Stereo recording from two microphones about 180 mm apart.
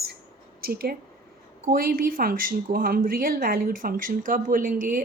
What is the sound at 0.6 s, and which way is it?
Speech, 55° right (ahead or behind).